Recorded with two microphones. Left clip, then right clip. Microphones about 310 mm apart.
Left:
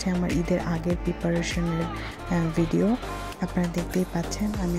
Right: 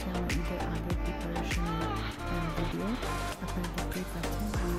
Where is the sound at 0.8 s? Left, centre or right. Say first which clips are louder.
Left 8 dB; centre.